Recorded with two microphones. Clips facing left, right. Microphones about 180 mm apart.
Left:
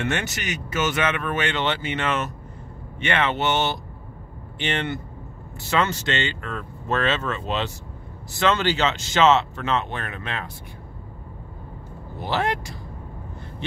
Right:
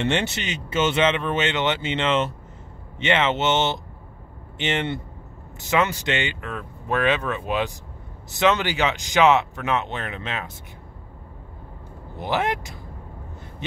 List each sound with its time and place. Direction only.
0.0 s speech: 30° right (ahead or behind)
12.2 s speech: 20° right (ahead or behind)